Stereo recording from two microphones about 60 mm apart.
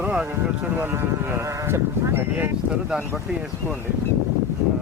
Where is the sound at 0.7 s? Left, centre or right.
Right.